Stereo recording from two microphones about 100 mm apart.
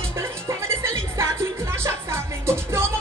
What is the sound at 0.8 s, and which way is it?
Music, 25° right (ahead or behind).